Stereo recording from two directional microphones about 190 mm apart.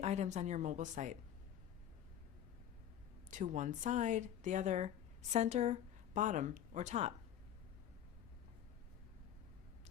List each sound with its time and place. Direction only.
0.0 s a woman's voice: 35° right (ahead or behind)
3.2 s a woman's voice: 40° right (ahead or behind)